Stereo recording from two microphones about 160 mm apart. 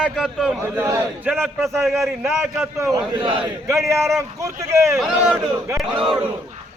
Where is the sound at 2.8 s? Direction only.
20° right (ahead or behind).